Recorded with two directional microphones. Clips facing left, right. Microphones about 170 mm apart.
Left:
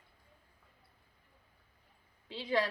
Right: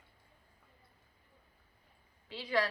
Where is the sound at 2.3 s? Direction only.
20° left (ahead or behind).